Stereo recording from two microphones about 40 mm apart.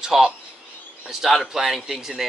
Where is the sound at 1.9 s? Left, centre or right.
Centre.